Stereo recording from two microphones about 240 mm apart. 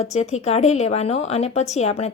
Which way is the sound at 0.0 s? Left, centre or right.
Left.